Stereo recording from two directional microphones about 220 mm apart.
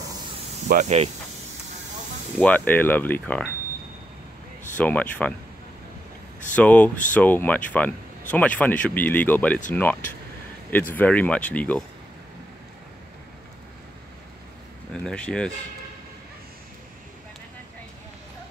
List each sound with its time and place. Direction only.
0.7 s speech: 35° right (ahead or behind)
2.3 s speech: 5° left (ahead or behind)
4.7 s speech: 5° left (ahead or behind)
6.5 s speech: 5° left (ahead or behind)
10.7 s speech: 10° left (ahead or behind)
15.0 s speech: 5° left (ahead or behind)